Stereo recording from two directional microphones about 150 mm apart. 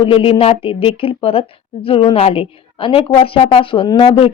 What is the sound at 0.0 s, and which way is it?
Speech, 40° left (ahead or behind).